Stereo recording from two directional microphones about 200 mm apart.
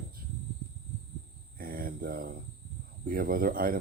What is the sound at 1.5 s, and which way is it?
Cricket, 45° right (ahead or behind).